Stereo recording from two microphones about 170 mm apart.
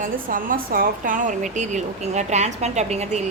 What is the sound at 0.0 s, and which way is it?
A woman's voice, 55° right (ahead or behind).